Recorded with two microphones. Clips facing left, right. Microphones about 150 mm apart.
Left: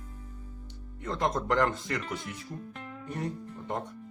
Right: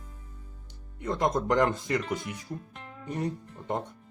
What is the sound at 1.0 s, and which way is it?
Speech, 15° right (ahead or behind).